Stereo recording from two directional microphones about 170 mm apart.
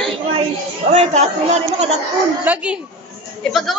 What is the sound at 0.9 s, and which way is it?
Speech, 40° right (ahead or behind).